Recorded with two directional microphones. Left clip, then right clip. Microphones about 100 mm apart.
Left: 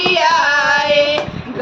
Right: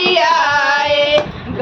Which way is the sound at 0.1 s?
15° right (ahead or behind).